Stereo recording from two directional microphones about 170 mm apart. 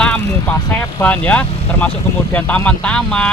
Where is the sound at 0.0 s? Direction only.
5° left (ahead or behind).